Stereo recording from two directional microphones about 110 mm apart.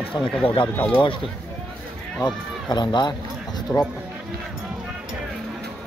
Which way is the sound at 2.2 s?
40° left (ahead or behind).